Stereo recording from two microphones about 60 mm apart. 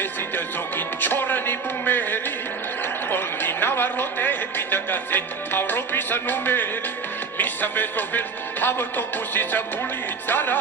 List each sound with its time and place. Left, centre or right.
0.0 s music: left
3.1 s a sound: left
7.3 s speech: left
8.6 s music: left